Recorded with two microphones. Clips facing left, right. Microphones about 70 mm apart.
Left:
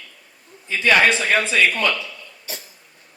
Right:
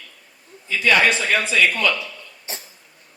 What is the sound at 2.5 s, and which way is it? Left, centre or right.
Cough, right.